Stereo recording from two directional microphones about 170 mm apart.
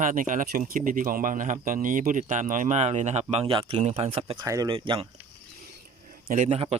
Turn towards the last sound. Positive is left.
turn(degrees=-35)  # may be behind; listen again after turning